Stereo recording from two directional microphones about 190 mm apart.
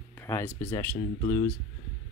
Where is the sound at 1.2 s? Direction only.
35° left (ahead or behind).